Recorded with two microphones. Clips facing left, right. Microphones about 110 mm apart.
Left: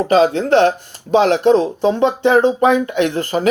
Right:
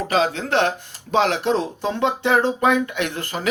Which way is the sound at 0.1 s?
35° left (ahead or behind).